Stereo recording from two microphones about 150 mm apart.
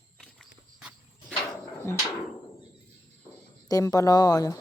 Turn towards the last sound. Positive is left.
turn(degrees=25)  # may be behind; listen again after turning